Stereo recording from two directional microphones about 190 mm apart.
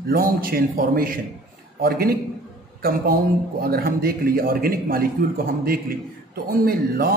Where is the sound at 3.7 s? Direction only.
50° right (ahead or behind).